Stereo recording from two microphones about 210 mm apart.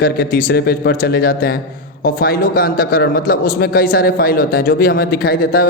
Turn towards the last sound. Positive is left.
turn(degrees=45)  # may be behind; listen again after turning